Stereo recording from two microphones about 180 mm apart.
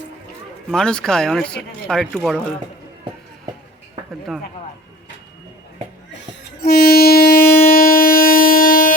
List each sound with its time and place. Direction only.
0.7 s speech: 5° left (ahead or behind)
6.6 s train: 55° left (ahead or behind)